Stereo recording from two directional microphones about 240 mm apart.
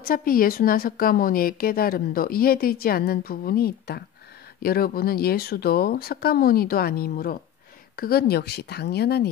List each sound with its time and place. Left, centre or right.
0.0 s a woman's voice: left